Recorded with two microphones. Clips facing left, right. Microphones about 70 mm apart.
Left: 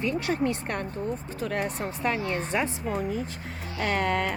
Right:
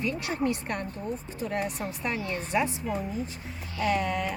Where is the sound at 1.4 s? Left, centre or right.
Left.